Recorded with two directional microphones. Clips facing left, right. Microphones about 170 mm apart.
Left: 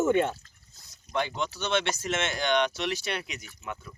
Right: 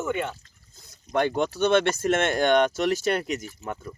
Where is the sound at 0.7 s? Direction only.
55° right (ahead or behind).